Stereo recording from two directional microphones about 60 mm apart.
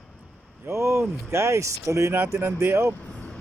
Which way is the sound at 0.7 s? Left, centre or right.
Right.